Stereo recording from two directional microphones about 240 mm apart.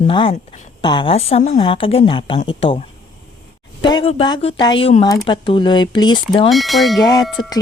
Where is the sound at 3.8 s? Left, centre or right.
Centre.